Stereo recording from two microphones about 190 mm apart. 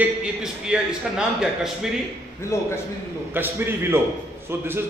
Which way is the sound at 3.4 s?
10° right (ahead or behind).